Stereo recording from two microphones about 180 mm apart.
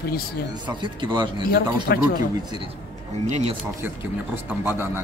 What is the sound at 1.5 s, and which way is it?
Speech, 60° left (ahead or behind).